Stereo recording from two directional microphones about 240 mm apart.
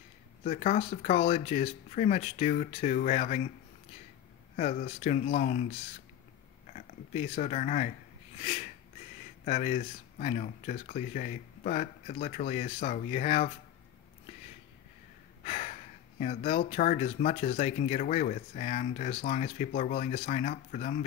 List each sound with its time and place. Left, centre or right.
0.4 s speech: left
4.6 s speech: left
6.7 s speech: left
15.4 s speech: left